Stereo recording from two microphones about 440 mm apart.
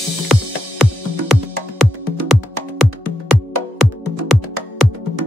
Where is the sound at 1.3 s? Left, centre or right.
Centre.